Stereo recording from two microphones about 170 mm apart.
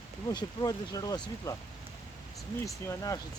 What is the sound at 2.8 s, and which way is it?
Speech, 20° left (ahead or behind).